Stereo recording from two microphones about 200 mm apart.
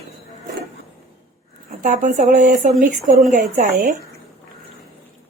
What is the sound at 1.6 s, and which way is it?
Speech, 40° right (ahead or behind).